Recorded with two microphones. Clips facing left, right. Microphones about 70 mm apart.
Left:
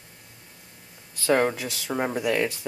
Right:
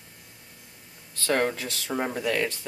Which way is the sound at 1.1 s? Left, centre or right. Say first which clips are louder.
Left 3 dB; centre.